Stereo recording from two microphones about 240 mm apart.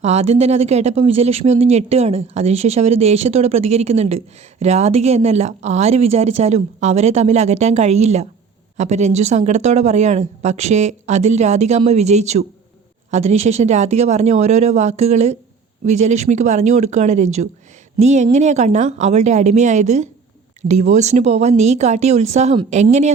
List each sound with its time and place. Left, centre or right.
0.0 s speech: right